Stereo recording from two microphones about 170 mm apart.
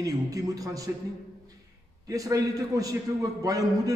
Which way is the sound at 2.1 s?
20° right (ahead or behind).